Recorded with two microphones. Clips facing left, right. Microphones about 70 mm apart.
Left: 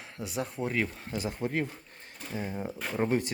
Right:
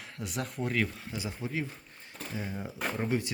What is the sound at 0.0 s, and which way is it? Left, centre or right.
Speech, left.